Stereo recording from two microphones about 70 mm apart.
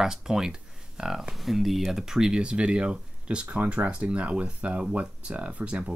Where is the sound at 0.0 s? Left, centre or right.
Centre.